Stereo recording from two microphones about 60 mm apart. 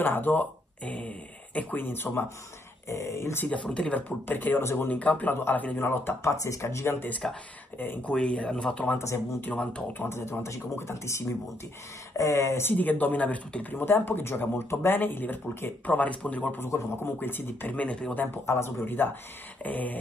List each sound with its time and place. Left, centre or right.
0.0 s speech: left
2.9 s speech: left
3.4 s speech: centre
4.3 s speech: left
5.9 s speech: left
6.4 s speech: left
7.2 s speech: centre
9.4 s speech: left
9.9 s speech: left
12.7 s speech: left
16.5 s speech: left; by 18.1 s centre
18.1 s speech: left